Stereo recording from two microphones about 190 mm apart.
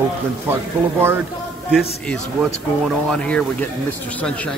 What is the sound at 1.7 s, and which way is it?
Speech, centre (ahead or behind).